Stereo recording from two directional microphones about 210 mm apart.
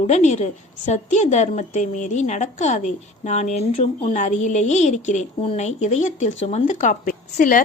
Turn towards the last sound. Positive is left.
turn(degrees=40)  # may be behind; listen again after turning